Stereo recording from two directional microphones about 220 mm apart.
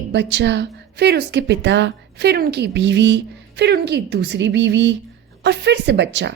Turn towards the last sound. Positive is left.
turn(degrees=-55)  # may be behind; listen again after turning